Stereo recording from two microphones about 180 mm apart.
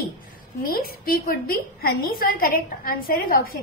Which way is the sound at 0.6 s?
55° left (ahead or behind).